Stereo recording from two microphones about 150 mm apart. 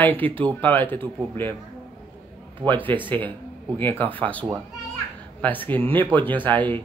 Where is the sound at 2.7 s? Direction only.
10° left (ahead or behind).